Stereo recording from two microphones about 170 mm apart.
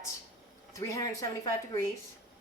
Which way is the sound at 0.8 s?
20° left (ahead or behind).